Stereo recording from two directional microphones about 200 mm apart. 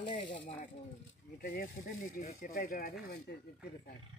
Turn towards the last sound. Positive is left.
turn(degrees=45)  # may be behind; listen again after turning